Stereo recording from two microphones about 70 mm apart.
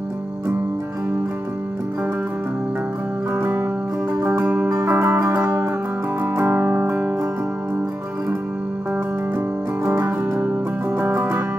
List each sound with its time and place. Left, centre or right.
3.3 s music: right
9.8 s music: right